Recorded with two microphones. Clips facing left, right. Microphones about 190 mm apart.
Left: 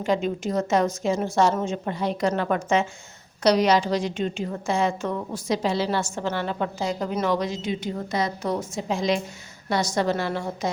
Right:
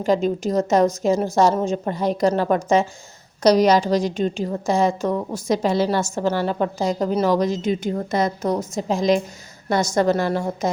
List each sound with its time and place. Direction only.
0.0 s a woman's voice: 40° right (ahead or behind)